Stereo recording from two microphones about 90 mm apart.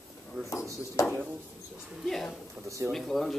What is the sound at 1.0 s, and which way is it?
Speech, 35° left (ahead or behind).